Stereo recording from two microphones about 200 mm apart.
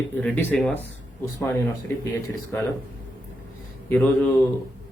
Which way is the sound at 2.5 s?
10° left (ahead or behind).